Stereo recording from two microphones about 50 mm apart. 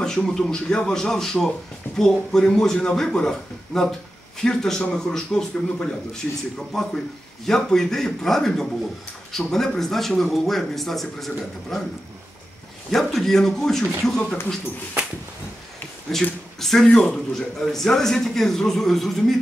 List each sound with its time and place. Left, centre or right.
0.0 s a man's voice: centre
12.9 s speech: centre
16.1 s speech: centre